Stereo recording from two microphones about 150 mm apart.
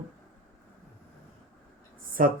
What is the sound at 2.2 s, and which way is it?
Speech, 65° right (ahead or behind).